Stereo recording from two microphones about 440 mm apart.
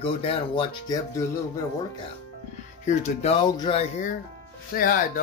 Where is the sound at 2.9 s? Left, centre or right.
Centre.